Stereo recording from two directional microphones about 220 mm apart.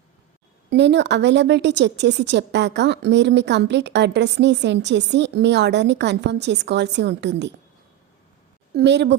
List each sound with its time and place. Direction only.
0.7 s a woman's voice: 50° right (ahead or behind)
8.7 s a woman's voice: 50° right (ahead or behind)